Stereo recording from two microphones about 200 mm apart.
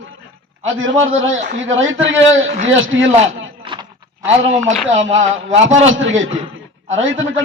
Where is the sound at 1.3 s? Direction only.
40° right (ahead or behind).